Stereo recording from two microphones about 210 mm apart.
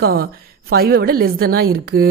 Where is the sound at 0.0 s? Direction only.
45° right (ahead or behind).